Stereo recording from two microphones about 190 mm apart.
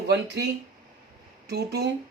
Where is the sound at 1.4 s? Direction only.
60° right (ahead or behind).